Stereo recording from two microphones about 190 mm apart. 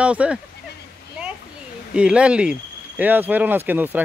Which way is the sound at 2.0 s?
5° right (ahead or behind).